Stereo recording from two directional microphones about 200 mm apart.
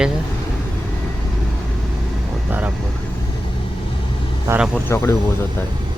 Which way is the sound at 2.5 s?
10° right (ahead or behind).